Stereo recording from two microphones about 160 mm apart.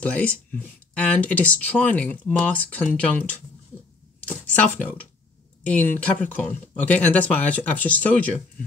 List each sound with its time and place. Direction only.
0.0 s speech: 10° left (ahead or behind)
4.6 s speech: 10° left (ahead or behind)